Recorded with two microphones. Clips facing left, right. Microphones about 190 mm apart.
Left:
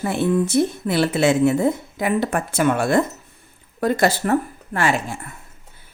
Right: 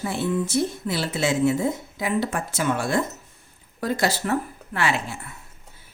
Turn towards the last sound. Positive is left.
turn(degrees=45)  # may be behind; listen again after turning